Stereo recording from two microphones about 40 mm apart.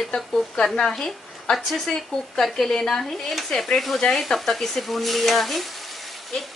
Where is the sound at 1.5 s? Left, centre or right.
Centre.